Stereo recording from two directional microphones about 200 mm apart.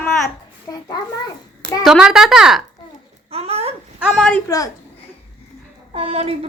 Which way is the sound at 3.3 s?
30° right (ahead or behind).